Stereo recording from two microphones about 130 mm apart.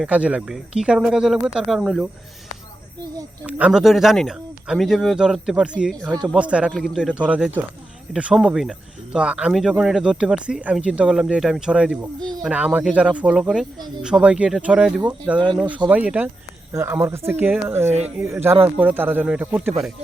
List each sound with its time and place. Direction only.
0.0 s speech: 10° right (ahead or behind)
3.4 s speech: 5° right (ahead or behind)